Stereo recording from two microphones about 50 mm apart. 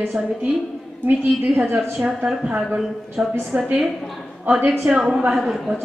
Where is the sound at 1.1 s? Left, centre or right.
Right.